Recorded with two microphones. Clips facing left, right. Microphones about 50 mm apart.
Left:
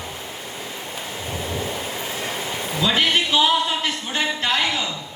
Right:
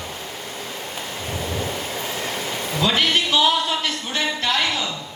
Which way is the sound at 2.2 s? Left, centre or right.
Left.